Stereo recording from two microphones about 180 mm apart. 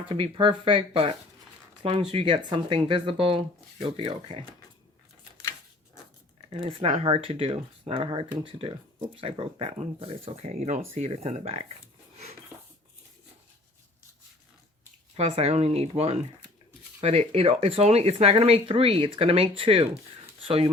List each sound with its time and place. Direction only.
0.2 s speech: 30° right (ahead or behind)
5.4 s a sound: 15° left (ahead or behind)
6.5 s speech: 30° right (ahead or behind)
15.1 s speech: 35° right (ahead or behind)